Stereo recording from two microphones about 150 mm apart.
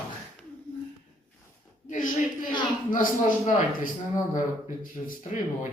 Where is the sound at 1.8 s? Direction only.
60° left (ahead or behind).